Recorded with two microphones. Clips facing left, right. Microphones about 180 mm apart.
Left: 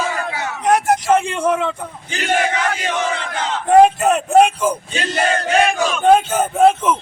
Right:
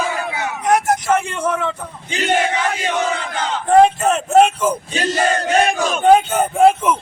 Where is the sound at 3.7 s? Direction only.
15° left (ahead or behind).